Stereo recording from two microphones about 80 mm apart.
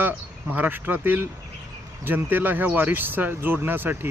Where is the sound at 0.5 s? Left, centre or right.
Right.